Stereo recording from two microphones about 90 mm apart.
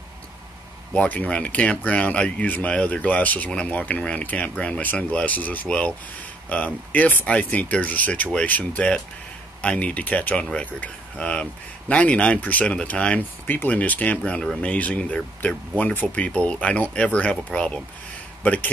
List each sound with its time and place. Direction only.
0.9 s speech: 15° left (ahead or behind)